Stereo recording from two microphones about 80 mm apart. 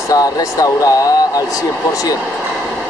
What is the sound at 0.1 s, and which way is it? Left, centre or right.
Speech, left.